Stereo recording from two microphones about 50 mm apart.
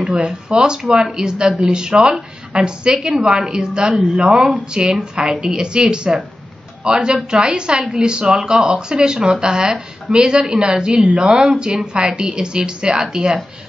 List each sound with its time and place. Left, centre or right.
0.0 s a woman's voice: centre